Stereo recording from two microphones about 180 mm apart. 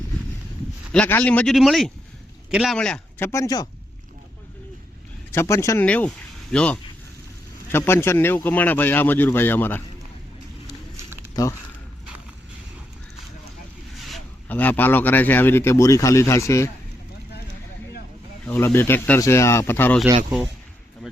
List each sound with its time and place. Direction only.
0.9 s speech: 10° left (ahead or behind)
5.3 s speech: 15° left (ahead or behind)
11.4 s speech: 20° left (ahead or behind)
14.0 s speech: 5° left (ahead or behind)
18.4 s speech: 10° left (ahead or behind)